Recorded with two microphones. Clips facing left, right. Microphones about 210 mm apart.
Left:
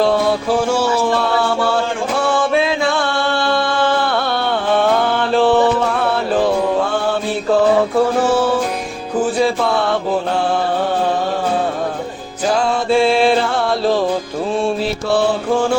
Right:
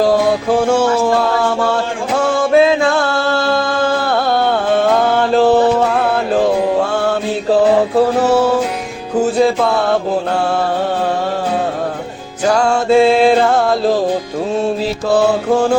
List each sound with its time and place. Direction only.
0.4 s music: 50° right (ahead or behind)
2.1 s music: 40° right (ahead or behind)
8.2 s music: 40° right (ahead or behind)
9.4 s mantra: 45° right (ahead or behind)
12.5 s music: 50° right (ahead or behind)
15.1 s music: 40° right (ahead or behind)